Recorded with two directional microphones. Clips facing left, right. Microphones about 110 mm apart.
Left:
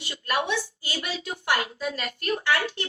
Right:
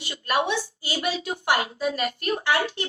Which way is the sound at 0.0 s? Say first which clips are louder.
Right 3 dB; 20° right (ahead or behind).